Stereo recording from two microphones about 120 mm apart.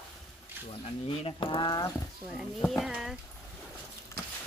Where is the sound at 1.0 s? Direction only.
50° left (ahead or behind).